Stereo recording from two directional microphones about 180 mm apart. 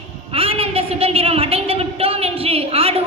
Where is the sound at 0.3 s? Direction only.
30° right (ahead or behind).